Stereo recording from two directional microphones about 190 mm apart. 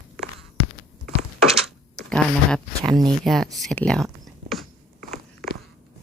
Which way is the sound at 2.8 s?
20° right (ahead or behind).